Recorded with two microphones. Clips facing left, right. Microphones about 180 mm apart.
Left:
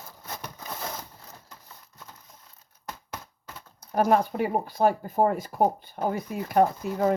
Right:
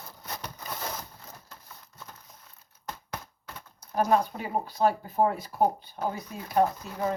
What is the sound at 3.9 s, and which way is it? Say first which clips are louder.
Speech: left 3 dB; 55° left (ahead or behind).